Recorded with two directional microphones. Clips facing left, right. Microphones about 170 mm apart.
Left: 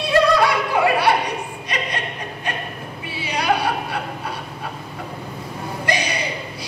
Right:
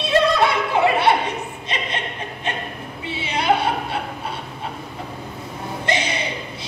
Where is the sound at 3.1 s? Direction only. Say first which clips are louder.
Right 1 dB; 25° right (ahead or behind).